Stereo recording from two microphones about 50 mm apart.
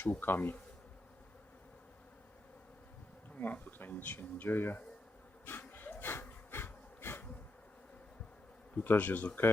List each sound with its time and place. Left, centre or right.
0.2 s speech: left
3.4 s speech: left
5.5 s a sound: left
8.7 s speech: left